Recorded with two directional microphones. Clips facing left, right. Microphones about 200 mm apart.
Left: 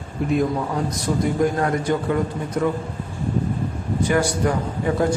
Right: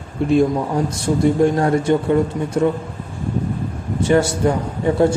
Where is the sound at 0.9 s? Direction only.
30° right (ahead or behind).